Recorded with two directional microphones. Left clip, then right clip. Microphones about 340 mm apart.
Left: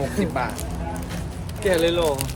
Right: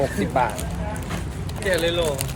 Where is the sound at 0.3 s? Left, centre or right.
Centre.